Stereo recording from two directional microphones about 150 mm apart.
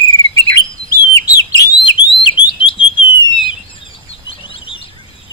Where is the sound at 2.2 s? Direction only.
30° left (ahead or behind).